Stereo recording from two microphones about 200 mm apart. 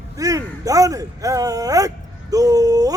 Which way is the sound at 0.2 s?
15° right (ahead or behind).